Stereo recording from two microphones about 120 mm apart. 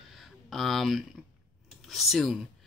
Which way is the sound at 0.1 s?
Centre (ahead or behind).